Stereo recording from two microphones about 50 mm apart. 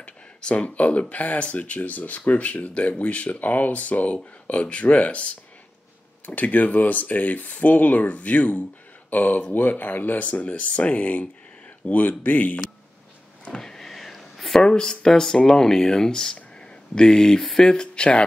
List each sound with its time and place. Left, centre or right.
0.0 s speech: left
13.5 s vehicle: centre
14.6 s speech: centre
16.5 s a sound: centre
17.4 s speech: centre